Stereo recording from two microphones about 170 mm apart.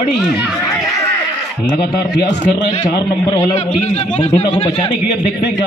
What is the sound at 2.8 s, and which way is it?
Speech, 20° left (ahead or behind).